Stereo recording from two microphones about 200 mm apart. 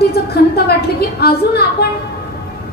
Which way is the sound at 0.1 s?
50° left (ahead or behind).